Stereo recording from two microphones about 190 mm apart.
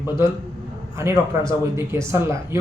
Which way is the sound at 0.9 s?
15° right (ahead or behind).